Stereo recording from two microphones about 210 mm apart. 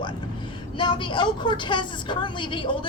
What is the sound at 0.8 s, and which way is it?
A woman's voice, 25° left (ahead or behind).